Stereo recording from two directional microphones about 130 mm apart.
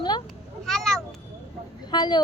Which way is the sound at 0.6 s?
5° left (ahead or behind).